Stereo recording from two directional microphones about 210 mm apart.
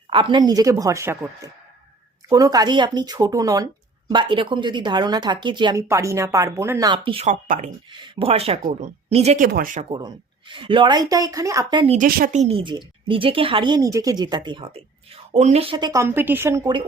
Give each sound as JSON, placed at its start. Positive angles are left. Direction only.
{"t": 0.1, "sound": "a woman's voice", "side_deg": -25}
{"t": 7.9, "sound": "a woman's voice", "side_deg": -25}
{"t": 10.5, "sound": "a woman's voice", "side_deg": -25}
{"t": 11.9, "sound": "a woman's voice", "side_deg": -45}